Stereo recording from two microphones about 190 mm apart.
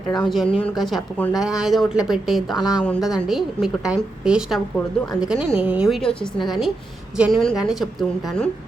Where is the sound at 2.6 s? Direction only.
20° left (ahead or behind).